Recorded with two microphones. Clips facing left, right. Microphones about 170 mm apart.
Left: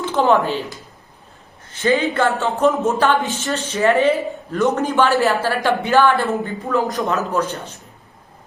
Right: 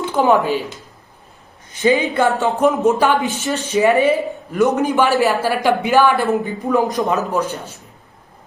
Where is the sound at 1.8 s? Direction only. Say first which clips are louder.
Right 2 dB; 15° right (ahead or behind).